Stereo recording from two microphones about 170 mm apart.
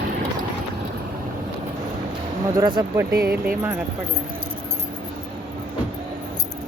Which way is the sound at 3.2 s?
65° right (ahead or behind).